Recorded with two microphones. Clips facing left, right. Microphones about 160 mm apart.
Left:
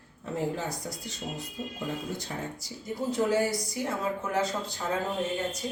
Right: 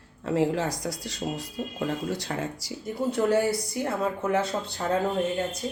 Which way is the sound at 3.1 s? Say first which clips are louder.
Right 3 dB; 60° right (ahead or behind).